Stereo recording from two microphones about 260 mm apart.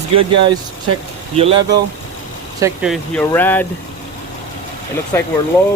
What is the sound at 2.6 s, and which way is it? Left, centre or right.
Speech, centre.